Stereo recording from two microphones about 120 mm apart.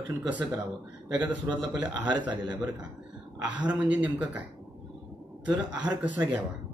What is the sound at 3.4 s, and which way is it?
Speech, 10° right (ahead or behind).